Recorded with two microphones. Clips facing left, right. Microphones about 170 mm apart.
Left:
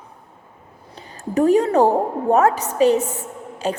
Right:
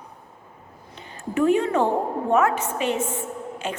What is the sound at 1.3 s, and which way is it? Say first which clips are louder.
A woman's voice: left 5 dB; 40° left (ahead or behind).